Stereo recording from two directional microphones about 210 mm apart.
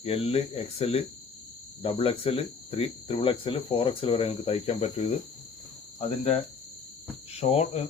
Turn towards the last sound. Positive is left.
turn(degrees=30)  # may be behind; listen again after turning